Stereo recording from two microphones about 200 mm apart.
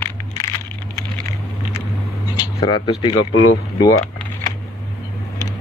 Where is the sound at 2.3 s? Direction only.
25° left (ahead or behind).